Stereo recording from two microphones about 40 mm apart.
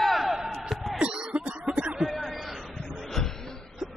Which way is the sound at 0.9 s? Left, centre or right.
Right.